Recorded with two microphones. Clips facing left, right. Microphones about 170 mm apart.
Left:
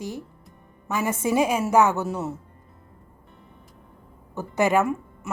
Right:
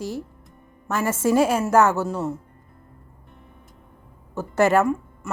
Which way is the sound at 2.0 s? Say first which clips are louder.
Right 2 dB; 5° left (ahead or behind).